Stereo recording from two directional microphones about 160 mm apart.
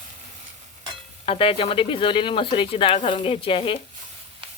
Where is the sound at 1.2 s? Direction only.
35° left (ahead or behind).